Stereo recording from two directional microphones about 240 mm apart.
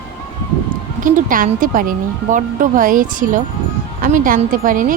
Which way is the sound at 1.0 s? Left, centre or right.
Right.